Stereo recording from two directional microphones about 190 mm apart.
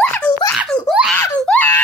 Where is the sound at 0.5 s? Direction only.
Centre (ahead or behind).